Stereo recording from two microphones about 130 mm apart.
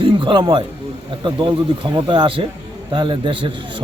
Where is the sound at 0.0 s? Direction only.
40° right (ahead or behind).